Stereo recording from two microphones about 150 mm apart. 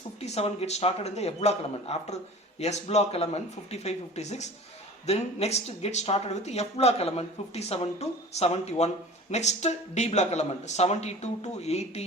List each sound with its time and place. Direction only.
0.2 s speech: 45° left (ahead or behind)